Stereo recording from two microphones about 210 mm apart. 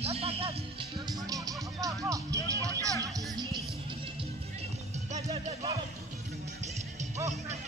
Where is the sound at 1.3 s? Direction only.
15° right (ahead or behind).